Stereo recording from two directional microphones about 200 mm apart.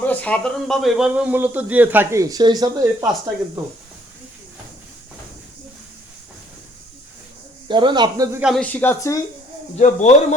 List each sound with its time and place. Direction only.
0.0 s speech: 10° left (ahead or behind); by 3.1 s 20° right (ahead or behind)
7.7 s speech: 25° right (ahead or behind)
8.4 s speech: centre (ahead or behind)
9.7 s speech: 35° left (ahead or behind)